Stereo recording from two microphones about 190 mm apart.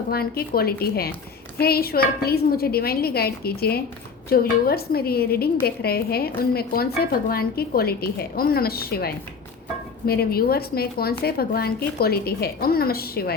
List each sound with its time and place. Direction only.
0.1 s a woman's voice: 55° left (ahead or behind)